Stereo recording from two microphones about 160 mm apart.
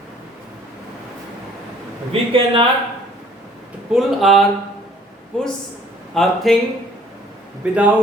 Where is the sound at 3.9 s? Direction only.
Centre (ahead or behind).